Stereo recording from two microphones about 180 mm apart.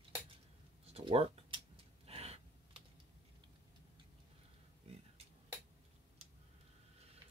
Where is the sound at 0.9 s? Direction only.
35° right (ahead or behind).